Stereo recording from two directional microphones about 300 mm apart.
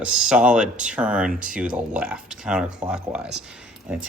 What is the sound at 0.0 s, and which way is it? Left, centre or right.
Speech, centre.